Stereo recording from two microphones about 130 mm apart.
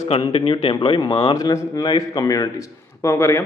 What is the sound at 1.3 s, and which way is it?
A man's voice, 30° left (ahead or behind).